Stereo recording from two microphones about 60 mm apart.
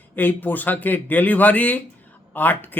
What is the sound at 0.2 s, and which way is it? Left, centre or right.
Speech, left.